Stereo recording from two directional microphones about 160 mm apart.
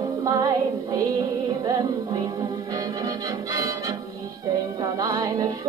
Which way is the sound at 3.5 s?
20° right (ahead or behind).